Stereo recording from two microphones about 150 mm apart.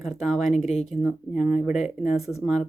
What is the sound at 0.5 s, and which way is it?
Speech, 45° left (ahead or behind).